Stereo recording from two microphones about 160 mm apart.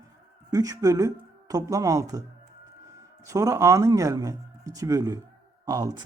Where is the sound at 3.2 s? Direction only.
20° right (ahead or behind).